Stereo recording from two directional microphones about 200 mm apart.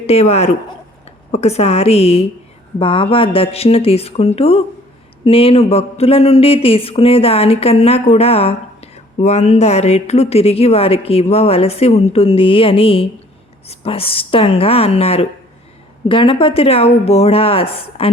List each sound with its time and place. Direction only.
0.0 s a woman's voice: 30° left (ahead or behind)